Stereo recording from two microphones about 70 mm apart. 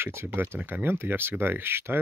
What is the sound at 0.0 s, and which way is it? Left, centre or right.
Speech, right.